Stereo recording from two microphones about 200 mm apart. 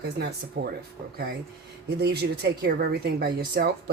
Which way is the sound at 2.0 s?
55° right (ahead or behind).